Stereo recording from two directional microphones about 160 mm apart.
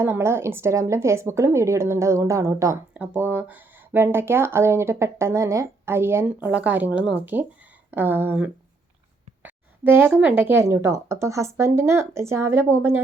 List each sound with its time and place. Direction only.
0.0 s speech: 15° right (ahead or behind)
2.9 s speech: 10° right (ahead or behind)